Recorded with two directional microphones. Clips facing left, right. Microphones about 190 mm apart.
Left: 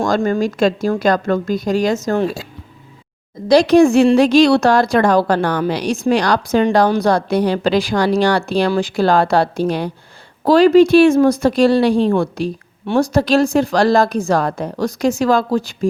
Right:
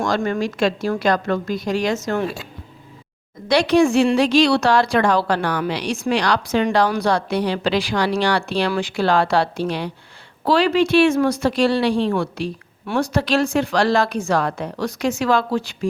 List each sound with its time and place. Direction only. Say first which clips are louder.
0.2 s a woman's voice: left 5 dB; 40° left (ahead or behind)
3.5 s a woman's voice: left 5 dB; 40° left (ahead or behind)